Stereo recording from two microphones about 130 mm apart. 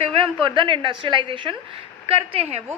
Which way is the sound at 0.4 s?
40° right (ahead or behind).